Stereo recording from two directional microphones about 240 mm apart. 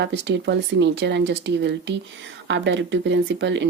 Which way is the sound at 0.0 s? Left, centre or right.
Right.